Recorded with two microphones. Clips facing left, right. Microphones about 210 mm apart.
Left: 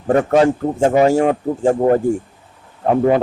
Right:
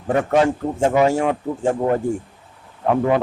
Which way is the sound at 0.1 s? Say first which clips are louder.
Left 4 dB; 40° left (ahead or behind).